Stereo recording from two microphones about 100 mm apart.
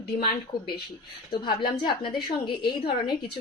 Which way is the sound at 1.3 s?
50° left (ahead or behind).